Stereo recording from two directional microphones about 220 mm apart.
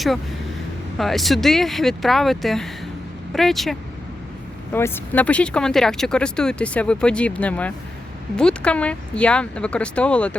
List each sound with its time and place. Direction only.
0.9 s speech: centre (ahead or behind)